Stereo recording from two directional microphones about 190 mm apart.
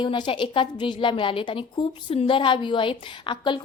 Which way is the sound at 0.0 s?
25° left (ahead or behind).